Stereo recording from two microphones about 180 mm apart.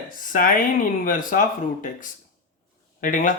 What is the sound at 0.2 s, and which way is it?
Speech, 50° left (ahead or behind).